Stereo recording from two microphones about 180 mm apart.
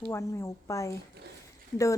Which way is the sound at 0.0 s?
15° left (ahead or behind).